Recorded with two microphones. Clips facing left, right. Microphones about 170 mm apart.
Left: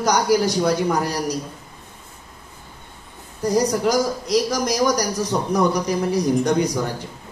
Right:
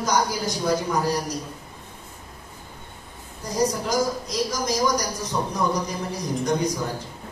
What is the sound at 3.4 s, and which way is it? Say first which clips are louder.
A woman's voice: left 5 dB; 70° left (ahead or behind).